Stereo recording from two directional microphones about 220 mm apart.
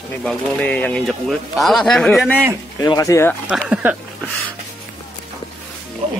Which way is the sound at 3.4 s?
5° right (ahead or behind).